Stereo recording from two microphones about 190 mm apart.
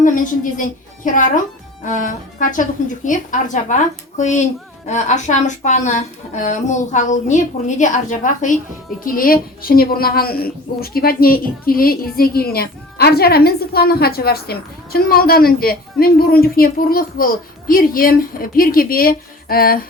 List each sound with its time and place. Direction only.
0.0 s a woman's voice: 45° left (ahead or behind)